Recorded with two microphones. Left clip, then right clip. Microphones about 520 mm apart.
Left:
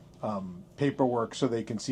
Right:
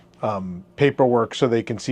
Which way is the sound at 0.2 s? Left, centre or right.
Right.